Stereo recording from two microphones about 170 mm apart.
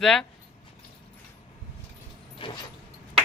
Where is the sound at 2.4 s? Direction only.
30° left (ahead or behind).